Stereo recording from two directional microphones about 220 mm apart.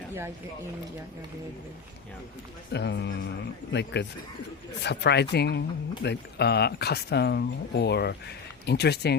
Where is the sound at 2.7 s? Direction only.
50° left (ahead or behind).